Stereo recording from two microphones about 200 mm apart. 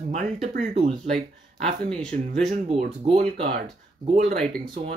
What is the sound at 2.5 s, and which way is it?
Speech, 35° right (ahead or behind).